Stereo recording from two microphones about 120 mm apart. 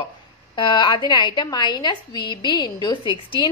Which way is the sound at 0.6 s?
40° left (ahead or behind).